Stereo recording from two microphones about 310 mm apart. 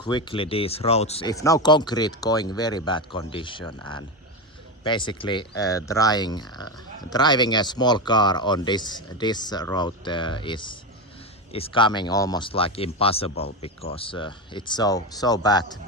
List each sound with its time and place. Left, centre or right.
0.0 s speech: centre